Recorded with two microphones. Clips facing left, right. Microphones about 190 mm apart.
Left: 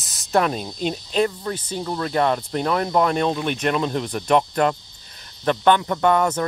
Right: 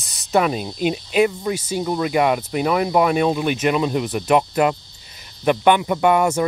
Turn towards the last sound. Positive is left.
turn(degrees=-10)  # may be behind; listen again after turning